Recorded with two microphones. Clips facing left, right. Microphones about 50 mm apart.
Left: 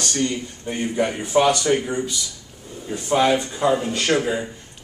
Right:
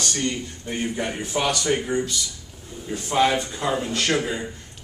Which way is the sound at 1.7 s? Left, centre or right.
Centre.